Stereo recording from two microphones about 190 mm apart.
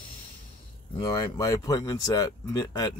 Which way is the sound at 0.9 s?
20° left (ahead or behind).